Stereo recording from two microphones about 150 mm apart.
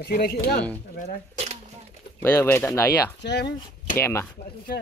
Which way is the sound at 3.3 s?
90° left.